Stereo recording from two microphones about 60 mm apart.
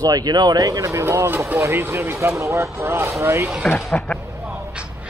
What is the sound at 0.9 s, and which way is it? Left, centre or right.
Speech, right.